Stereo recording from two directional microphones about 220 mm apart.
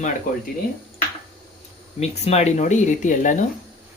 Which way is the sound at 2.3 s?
30° left (ahead or behind).